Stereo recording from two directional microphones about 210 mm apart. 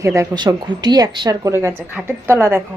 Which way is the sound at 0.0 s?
15° right (ahead or behind).